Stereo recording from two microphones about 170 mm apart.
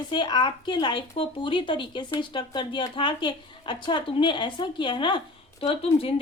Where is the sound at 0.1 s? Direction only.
25° left (ahead or behind).